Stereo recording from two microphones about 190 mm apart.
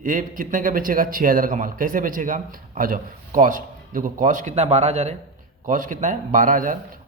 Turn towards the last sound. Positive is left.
turn(degrees=-45)  # may be behind; listen again after turning